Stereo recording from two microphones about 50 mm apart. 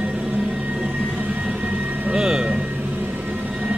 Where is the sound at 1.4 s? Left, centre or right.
Right.